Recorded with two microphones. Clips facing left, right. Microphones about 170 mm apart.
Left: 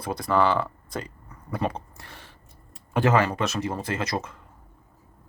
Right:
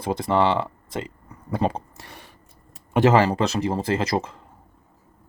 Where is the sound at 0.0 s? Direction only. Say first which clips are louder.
Right 2 dB; 25° right (ahead or behind).